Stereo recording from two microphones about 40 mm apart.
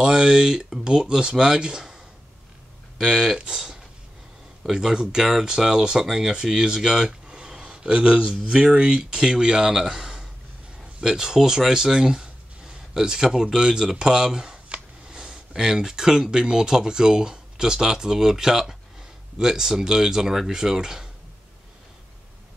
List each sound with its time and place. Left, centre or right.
0.0 s speech: centre
3.0 s speech: centre
4.7 s speech: centre
15.0 s a sound: centre
15.5 s speech: centre